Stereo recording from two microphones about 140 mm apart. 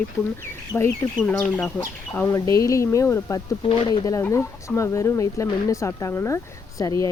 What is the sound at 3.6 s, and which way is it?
Speech, 40° left (ahead or behind).